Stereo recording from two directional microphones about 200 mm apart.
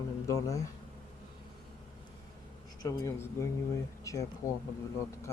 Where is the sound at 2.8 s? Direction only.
15° left (ahead or behind).